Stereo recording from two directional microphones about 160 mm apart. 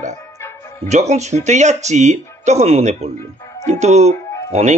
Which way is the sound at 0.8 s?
45° right (ahead or behind).